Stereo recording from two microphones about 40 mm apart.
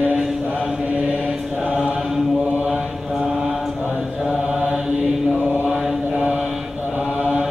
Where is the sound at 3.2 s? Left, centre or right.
Centre.